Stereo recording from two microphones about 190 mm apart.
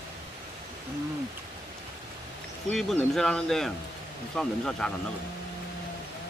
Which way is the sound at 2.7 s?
Centre (ahead or behind).